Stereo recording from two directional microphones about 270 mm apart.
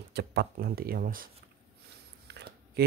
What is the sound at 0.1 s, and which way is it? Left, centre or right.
Speech, right.